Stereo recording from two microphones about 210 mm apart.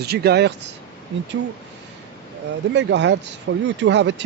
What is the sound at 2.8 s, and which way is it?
Speech, 55° right (ahead or behind).